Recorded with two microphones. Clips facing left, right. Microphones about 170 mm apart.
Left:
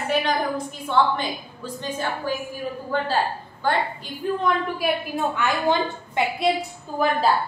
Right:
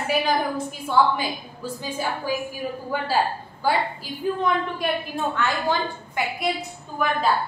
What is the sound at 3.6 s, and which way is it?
Speech, 10° right (ahead or behind).